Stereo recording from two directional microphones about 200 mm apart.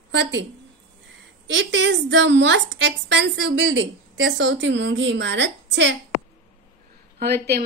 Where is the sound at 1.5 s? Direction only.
65° right (ahead or behind).